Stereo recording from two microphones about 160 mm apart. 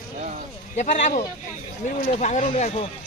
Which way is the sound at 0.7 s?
50° left (ahead or behind).